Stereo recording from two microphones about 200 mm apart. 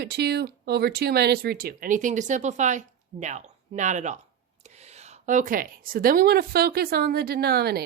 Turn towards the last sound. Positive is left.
turn(degrees=-50)  # may be behind; listen again after turning